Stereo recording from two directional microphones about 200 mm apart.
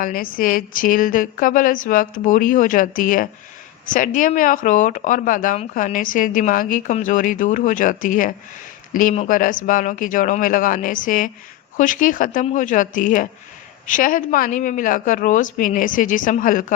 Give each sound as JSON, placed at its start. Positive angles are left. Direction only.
{"t": 0.0, "sound": "a woman's voice", "side_deg": 45}